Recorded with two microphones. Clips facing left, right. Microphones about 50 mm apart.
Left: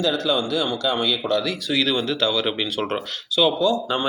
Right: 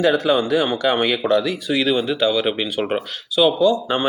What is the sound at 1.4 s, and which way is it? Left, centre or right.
Speech, centre.